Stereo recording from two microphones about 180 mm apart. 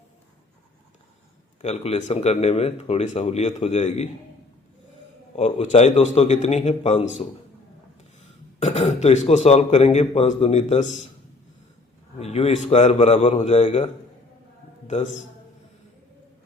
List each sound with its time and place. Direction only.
1.6 s speech: 35° left (ahead or behind)
5.4 s speech: 35° left (ahead or behind)
8.5 s speech: 40° left (ahead or behind)
12.2 s speech: 35° left (ahead or behind)